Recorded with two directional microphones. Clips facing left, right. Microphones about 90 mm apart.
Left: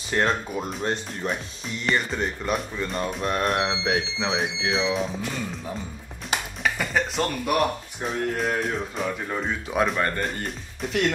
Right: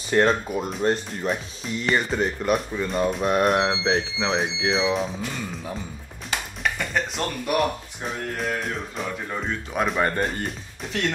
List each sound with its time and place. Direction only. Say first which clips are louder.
0.1 s speech: right 4 dB; centre (ahead or behind)
6.6 s speech: left 1 dB; centre (ahead or behind)
9.9 s speech: right 2 dB; 20° right (ahead or behind)
10.2 s speech: right 2 dB; centre (ahead or behind)